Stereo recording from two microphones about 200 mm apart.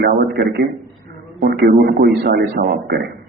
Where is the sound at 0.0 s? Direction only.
50° right (ahead or behind).